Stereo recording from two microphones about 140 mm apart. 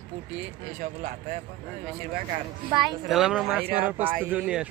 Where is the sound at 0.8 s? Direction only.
50° right (ahead or behind).